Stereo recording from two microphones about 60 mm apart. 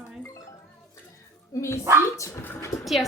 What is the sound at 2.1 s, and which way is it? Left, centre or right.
Dog, left.